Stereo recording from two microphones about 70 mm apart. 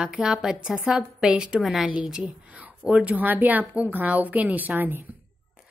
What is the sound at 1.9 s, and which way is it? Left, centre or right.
Speech, centre.